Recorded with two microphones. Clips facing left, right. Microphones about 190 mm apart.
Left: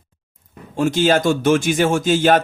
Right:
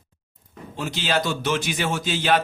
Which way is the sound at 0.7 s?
50° left (ahead or behind).